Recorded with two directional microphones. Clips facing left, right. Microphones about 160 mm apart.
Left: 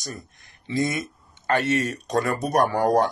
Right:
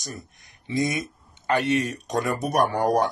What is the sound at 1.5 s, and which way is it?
Speech, 15° right (ahead or behind).